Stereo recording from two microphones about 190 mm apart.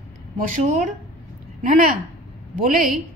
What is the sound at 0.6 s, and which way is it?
A woman's voice, 35° right (ahead or behind).